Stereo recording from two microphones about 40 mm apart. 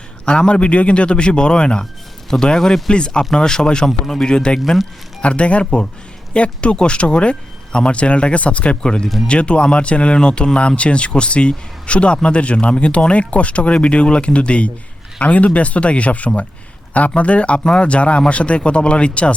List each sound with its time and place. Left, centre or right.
0.3 s speech: left
2.6 s speech: centre
2.9 s speech: left